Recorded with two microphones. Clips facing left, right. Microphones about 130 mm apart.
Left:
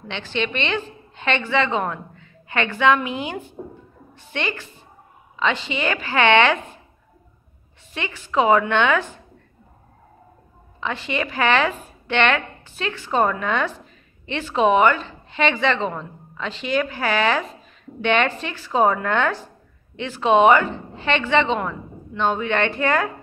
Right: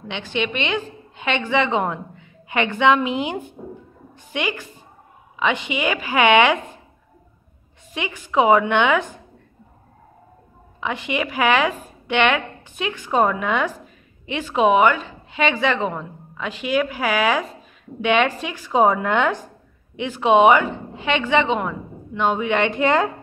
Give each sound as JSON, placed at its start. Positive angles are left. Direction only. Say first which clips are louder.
{"t": 0.1, "sound": "a woman's voice", "louder": "right 1 dB", "side_deg": -15}
{"t": 7.9, "sound": "a woman's voice", "louder": "right 2 dB", "side_deg": -15}
{"t": 10.8, "sound": "a woman's voice", "louder": "right 1 dB", "side_deg": -15}